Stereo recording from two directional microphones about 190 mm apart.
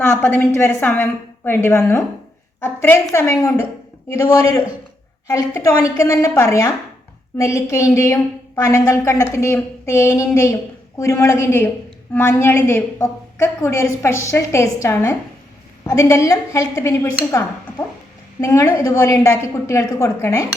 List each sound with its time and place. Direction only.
0.0 s a woman's voice: 10° left (ahead or behind)